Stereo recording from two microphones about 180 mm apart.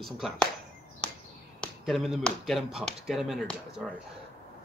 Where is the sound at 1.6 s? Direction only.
Centre (ahead or behind).